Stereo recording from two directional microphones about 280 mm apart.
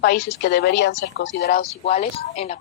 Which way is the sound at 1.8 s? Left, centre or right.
Left.